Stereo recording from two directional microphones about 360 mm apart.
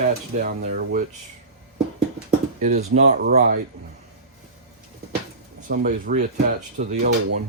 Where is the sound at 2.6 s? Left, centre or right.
Right.